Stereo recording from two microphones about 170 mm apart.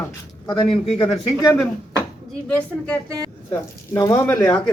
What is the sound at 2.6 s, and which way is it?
Speech, 5° left (ahead or behind).